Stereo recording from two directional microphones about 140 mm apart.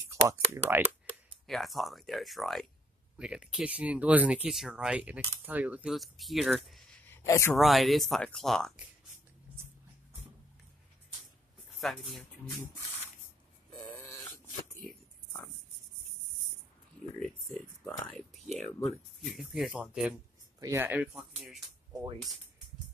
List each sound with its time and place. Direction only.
0.1 s speech: 20° right (ahead or behind)
1.5 s speech: centre (ahead or behind)
5.9 s speech: centre (ahead or behind)
7.1 s a sound: 20° left (ahead or behind)
7.5 s speech: centre (ahead or behind)
11.8 s speech: centre (ahead or behind)
13.9 s dog: 20° left (ahead or behind)
17.2 s speech: 5° left (ahead or behind)
20.5 s speech: 20° right (ahead or behind)